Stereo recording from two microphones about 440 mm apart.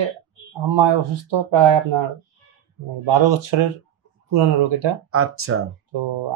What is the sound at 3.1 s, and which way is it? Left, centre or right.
Speech, right.